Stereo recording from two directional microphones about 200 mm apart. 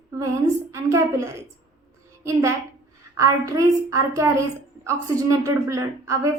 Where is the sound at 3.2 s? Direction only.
15° right (ahead or behind).